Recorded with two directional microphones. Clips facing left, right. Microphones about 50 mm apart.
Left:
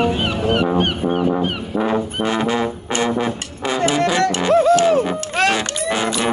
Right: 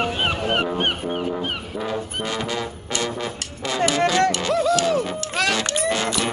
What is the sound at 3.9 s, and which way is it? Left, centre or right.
Music, left.